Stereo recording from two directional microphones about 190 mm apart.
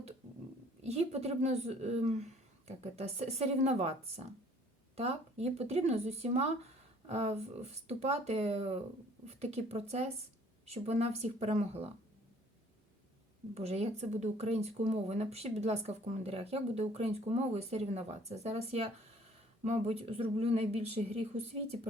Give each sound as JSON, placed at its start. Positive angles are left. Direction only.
{"t": 0.8, "sound": "speech", "side_deg": -35}
{"t": 13.5, "sound": "speech", "side_deg": -35}